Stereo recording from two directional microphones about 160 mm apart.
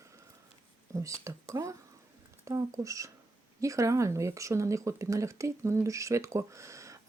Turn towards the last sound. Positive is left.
turn(degrees=-20)  # may be behind; listen again after turning